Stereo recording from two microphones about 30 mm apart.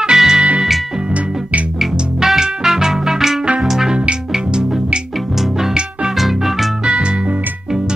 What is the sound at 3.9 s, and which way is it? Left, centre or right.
Music, right.